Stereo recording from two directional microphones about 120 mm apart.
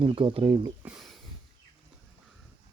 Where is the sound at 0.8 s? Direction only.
5° right (ahead or behind).